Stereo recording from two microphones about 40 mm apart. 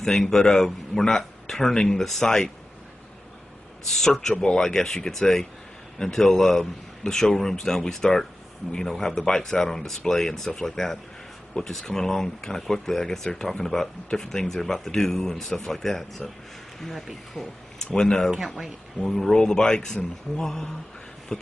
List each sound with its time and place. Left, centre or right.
0.0 s speech: centre
3.9 s speech: centre
17.9 s speech: centre
18.9 s speech: centre
20.3 s speech: centre
21.3 s a sound: centre